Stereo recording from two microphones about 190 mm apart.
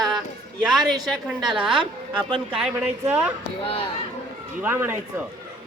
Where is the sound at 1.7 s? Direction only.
25° right (ahead or behind).